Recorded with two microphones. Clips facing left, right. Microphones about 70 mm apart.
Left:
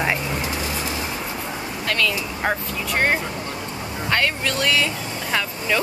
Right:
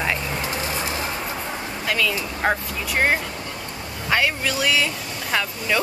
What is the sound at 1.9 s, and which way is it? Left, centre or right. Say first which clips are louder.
Speech: even; centre.